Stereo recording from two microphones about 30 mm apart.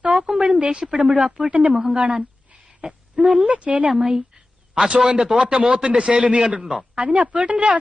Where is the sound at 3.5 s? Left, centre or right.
Right.